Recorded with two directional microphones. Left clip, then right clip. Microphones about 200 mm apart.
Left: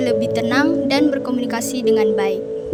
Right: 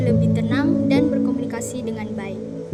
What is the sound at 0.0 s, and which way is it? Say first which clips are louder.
A woman's voice: left 5 dB; 55° left (ahead or behind).